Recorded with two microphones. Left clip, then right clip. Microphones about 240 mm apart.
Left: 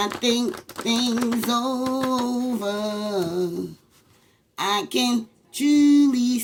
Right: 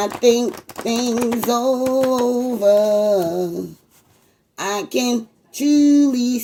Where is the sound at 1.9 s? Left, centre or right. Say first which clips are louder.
Right 7 dB; left.